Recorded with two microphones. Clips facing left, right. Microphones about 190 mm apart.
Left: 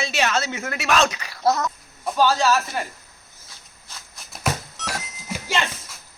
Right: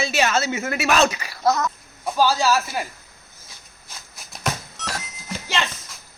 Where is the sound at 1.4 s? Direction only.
35° left (ahead or behind).